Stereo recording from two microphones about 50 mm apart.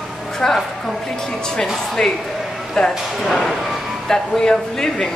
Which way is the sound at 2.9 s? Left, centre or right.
Centre.